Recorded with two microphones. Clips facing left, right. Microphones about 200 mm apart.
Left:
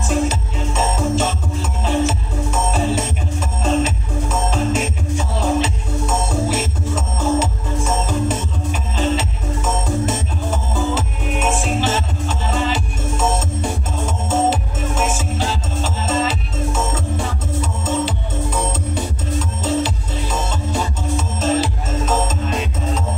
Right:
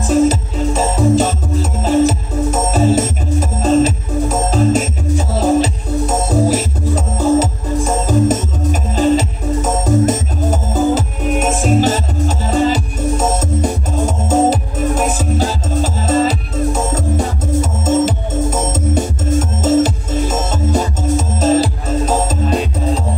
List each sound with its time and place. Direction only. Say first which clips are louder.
0.0 s music: right 8 dB; 35° right (ahead or behind)